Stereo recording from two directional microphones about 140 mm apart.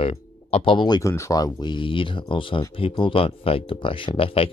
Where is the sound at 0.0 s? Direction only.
45° left (ahead or behind).